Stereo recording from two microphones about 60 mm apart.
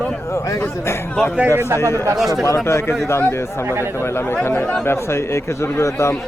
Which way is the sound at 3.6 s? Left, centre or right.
Right.